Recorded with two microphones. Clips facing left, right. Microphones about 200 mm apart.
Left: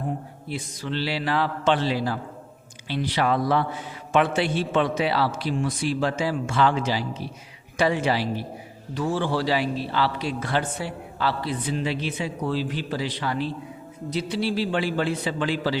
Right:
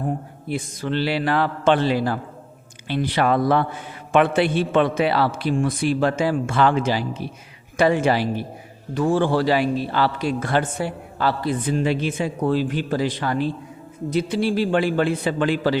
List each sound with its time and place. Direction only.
0.4 s a man's voice: 50° right (ahead or behind)